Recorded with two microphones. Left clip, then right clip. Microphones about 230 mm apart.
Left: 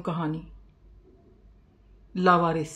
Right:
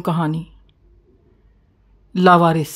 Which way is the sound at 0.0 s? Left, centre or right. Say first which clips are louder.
Right 9 dB; right.